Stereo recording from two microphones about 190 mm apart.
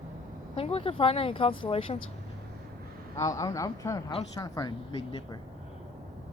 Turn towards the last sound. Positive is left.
turn(degrees=25)  # may be behind; listen again after turning